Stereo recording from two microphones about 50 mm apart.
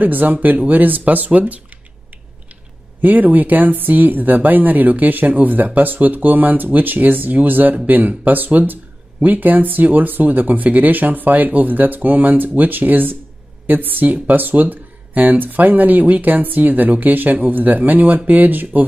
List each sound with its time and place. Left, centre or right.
0.0 s speech: right
3.0 s speech: right